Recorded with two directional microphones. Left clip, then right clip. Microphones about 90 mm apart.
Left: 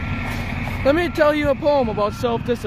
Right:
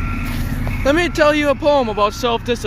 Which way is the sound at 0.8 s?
40° left (ahead or behind).